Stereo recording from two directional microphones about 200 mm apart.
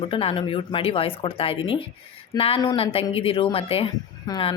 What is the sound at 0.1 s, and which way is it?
Speech, 25° left (ahead or behind).